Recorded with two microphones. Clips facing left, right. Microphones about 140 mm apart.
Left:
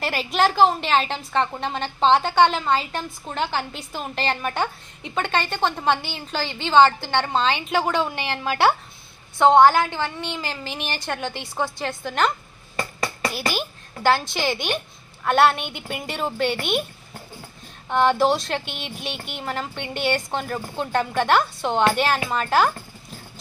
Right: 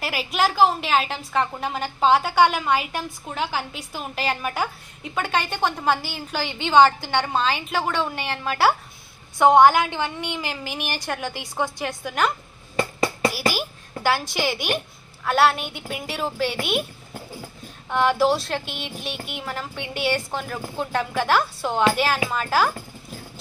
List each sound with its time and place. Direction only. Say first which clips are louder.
0.0 s a woman's voice: left 2 dB; 5° right (ahead or behind)
6.4 s a woman's voice: even; 15° right (ahead or behind)
17.9 s a woman's voice: left 1 dB; 5° right (ahead or behind)